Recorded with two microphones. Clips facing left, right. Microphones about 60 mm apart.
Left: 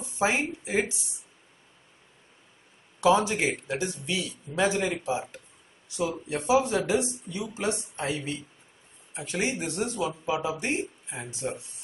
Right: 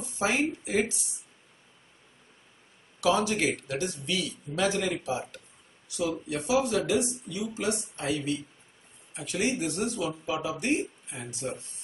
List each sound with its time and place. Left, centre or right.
0.2 s a man's voice: left
3.1 s a man's voice: left